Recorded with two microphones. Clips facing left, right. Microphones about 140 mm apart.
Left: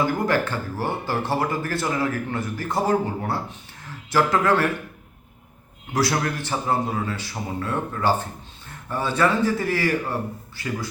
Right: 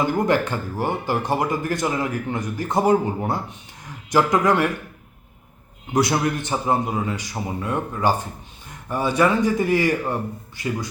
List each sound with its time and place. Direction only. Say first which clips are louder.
0.0 s speech: right 2 dB; 20° right (ahead or behind)
5.9 s speech: right 3 dB; 20° right (ahead or behind)